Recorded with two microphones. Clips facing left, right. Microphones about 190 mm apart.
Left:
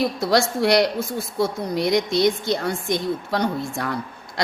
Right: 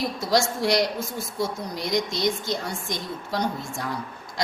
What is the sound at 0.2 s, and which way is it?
Speech, 65° left (ahead or behind).